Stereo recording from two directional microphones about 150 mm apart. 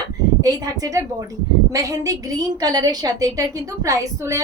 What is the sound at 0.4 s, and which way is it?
A woman's voice, 25° right (ahead or behind).